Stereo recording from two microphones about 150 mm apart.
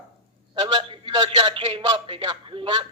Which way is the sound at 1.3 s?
40° right (ahead or behind).